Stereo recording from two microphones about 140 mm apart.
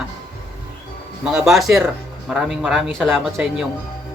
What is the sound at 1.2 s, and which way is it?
Speech, centre (ahead or behind).